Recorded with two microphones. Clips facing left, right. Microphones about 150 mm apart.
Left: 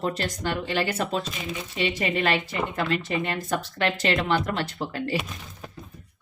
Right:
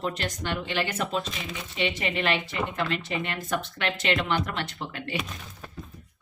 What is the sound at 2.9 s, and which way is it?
Speech, 40° left (ahead or behind).